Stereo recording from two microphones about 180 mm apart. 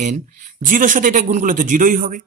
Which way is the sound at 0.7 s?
45° right (ahead or behind).